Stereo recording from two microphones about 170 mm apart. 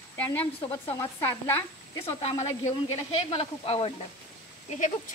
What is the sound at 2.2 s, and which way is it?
Speech, 40° left (ahead or behind).